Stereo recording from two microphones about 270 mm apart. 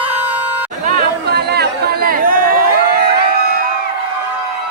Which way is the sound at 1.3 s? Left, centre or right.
Right.